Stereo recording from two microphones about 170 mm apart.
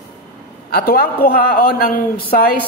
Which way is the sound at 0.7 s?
60° left (ahead or behind).